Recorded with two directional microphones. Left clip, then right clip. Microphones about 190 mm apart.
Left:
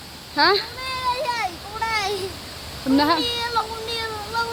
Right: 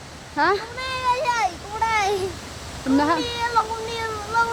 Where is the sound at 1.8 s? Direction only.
25° right (ahead or behind).